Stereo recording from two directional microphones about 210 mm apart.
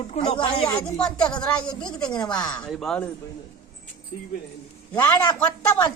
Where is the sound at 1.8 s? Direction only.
20° left (ahead or behind).